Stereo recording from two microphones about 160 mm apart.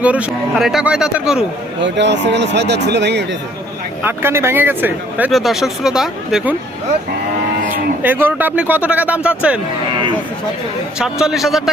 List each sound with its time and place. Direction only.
0.0 s speech: 10° right (ahead or behind)
2.0 s speech: 90° right
4.0 s a man's voice: 15° right (ahead or behind)
8.0 s a man's voice: 10° right (ahead or behind)
11.0 s speech: 5° right (ahead or behind)